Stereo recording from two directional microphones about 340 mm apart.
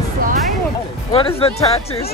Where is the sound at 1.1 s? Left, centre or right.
Centre.